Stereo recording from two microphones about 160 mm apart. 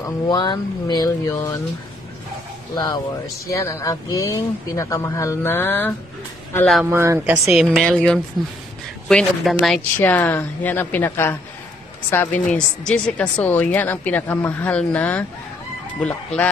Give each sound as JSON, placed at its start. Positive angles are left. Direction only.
{"t": 0.0, "sound": "speech", "side_deg": 25}
{"t": 2.7, "sound": "speech", "side_deg": 25}
{"t": 6.9, "sound": "speech", "side_deg": -15}
{"t": 7.4, "sound": "speech", "side_deg": 0}